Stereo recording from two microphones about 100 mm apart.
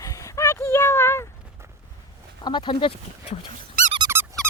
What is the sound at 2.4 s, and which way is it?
Speech, 50° left (ahead or behind).